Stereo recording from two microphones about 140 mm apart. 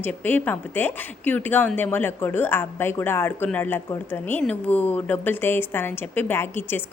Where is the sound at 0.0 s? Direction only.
15° left (ahead or behind).